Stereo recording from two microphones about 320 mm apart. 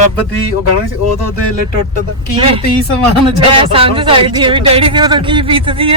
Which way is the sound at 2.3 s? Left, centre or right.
Centre.